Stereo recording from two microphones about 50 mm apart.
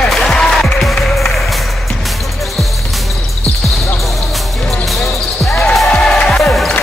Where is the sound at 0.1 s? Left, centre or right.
Centre.